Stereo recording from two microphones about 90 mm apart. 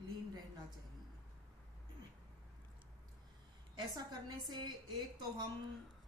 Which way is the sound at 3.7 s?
50° right (ahead or behind).